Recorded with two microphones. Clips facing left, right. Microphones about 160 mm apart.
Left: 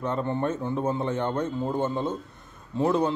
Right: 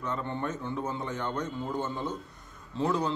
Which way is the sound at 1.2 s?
55° left (ahead or behind).